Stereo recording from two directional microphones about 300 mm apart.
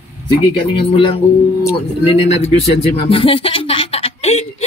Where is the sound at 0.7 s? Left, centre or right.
Centre.